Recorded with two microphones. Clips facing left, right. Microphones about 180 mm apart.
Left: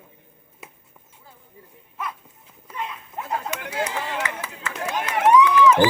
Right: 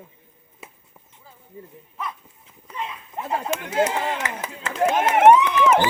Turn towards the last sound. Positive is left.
turn(degrees=-25)  # may be behind; listen again after turning